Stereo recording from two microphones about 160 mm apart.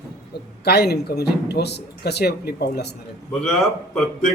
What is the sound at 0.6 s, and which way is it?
Speech, 90° left.